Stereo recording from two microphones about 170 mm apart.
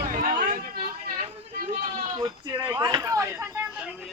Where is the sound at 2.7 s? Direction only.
20° right (ahead or behind).